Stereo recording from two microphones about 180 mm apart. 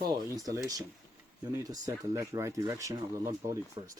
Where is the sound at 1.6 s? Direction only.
20° right (ahead or behind).